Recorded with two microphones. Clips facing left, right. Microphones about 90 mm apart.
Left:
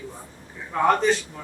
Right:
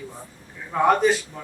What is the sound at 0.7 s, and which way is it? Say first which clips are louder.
Speech: right 2 dB; 5° right (ahead or behind).